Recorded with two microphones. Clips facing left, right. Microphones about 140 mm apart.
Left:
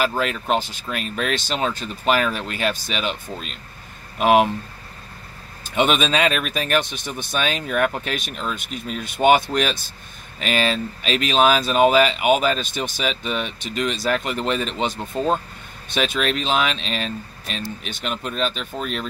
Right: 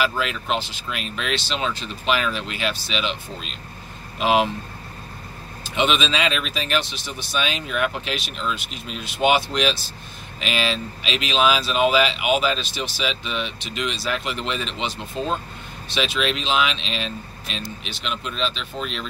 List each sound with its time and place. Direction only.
0.0 s speech: 45° left (ahead or behind)
5.8 s speech: 50° left (ahead or behind)